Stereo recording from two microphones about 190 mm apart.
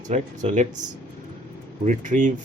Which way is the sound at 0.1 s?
40° right (ahead or behind).